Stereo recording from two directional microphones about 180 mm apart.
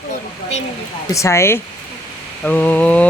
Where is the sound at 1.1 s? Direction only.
15° left (ahead or behind).